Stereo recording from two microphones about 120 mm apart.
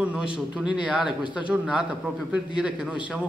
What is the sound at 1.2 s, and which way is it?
Speech, 40° left (ahead or behind).